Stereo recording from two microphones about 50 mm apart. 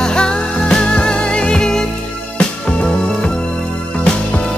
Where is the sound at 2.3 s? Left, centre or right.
Left.